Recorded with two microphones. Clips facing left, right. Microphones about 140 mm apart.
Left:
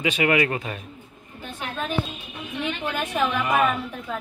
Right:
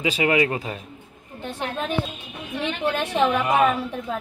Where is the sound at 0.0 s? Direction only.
25° right (ahead or behind).